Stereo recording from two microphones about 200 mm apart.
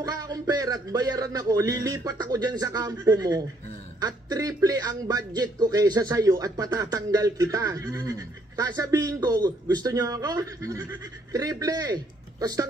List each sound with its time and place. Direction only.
0.0 s speech: 20° right (ahead or behind)